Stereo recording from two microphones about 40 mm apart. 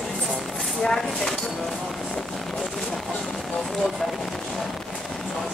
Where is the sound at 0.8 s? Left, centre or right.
Centre.